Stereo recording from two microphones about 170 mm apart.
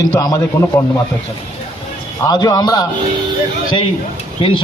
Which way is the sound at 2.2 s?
20° left (ahead or behind).